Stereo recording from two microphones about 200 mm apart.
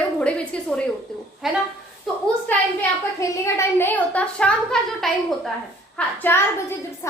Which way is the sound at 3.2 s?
15° left (ahead or behind).